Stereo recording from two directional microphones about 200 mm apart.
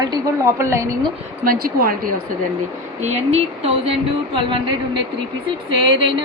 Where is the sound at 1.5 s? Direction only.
45° right (ahead or behind).